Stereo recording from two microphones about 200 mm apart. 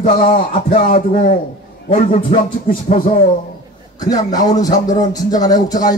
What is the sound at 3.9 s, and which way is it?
Music, 20° left (ahead or behind).